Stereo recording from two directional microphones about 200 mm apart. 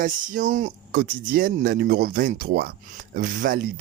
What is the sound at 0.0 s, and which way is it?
Speech, 40° right (ahead or behind).